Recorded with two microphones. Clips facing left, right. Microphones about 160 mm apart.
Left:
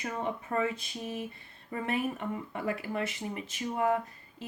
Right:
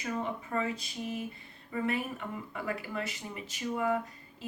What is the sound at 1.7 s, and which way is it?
A woman's voice, 50° left (ahead or behind).